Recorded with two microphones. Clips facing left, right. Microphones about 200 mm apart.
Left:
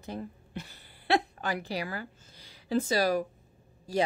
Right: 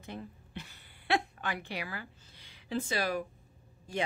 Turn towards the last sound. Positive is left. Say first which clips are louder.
# left 7 dB
turn(degrees=40)  # may be behind; listen again after turning